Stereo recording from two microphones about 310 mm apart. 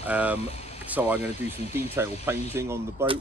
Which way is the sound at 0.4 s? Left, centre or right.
Centre.